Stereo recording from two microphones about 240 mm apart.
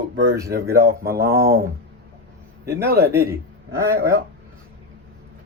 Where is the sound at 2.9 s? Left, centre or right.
Right.